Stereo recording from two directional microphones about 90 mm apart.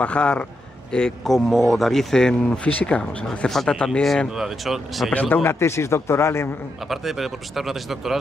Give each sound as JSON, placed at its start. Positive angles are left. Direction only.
{"t": 0.0, "sound": "speech", "side_deg": 10}
{"t": 5.3, "sound": "a man's voice", "side_deg": 25}
{"t": 6.9, "sound": "speech", "side_deg": 0}